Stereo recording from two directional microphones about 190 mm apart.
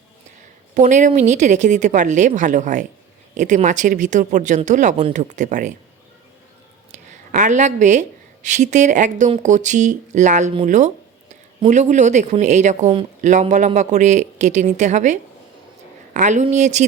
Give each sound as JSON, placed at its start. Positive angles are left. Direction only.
{"t": 0.7, "sound": "speech", "side_deg": -40}
{"t": 6.9, "sound": "speech", "side_deg": -40}